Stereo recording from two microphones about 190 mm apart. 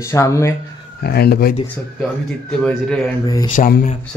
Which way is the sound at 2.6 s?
5° left (ahead or behind).